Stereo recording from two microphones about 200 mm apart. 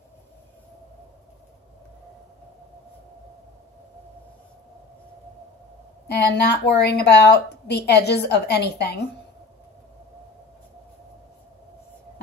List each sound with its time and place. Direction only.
6.0 s a woman's voice: 55° left (ahead or behind)